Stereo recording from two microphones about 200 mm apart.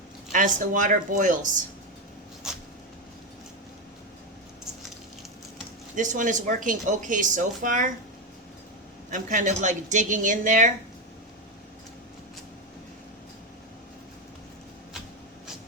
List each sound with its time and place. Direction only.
0.3 s speech: 40° right (ahead or behind)
2.4 s a sound: 5° right (ahead or behind)
6.0 s speech: 40° right (ahead or behind)
9.0 s speech: 40° right (ahead or behind)